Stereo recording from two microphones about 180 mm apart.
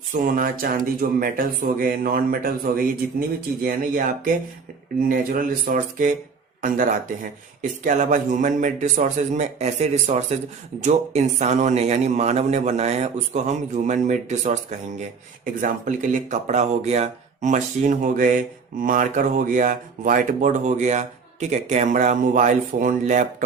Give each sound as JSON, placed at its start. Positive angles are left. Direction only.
{"t": 0.1, "sound": "speech", "side_deg": -50}